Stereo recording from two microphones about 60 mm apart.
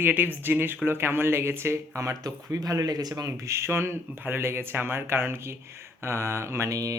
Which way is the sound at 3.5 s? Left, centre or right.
Right.